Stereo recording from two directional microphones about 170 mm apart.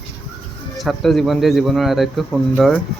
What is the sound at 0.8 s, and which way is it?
Speech, centre (ahead or behind).